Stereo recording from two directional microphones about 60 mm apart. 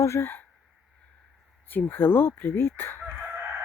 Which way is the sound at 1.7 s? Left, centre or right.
Left.